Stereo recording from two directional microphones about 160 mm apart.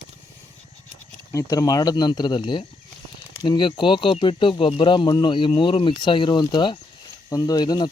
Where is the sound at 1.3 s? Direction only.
20° left (ahead or behind).